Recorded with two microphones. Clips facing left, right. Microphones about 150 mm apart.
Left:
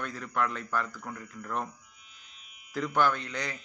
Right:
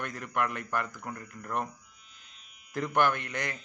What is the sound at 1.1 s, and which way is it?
Speech, 45° right (ahead or behind).